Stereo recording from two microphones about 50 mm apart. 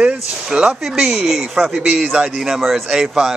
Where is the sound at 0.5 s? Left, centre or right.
Centre.